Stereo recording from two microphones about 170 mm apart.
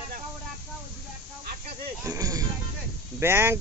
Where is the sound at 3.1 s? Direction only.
15° right (ahead or behind).